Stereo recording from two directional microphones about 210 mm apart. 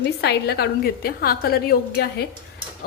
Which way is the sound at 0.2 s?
50° left (ahead or behind).